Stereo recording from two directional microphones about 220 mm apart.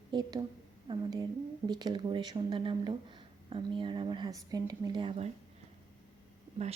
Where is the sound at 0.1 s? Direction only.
20° right (ahead or behind).